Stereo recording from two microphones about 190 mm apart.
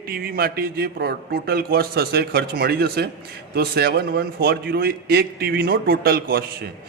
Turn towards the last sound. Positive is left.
turn(degrees=-55)  # may be behind; listen again after turning